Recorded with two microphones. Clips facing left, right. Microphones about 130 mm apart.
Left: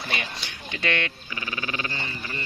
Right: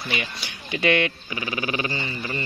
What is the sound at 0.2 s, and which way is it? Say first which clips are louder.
Speech: right 2 dB; 10° right (ahead or behind).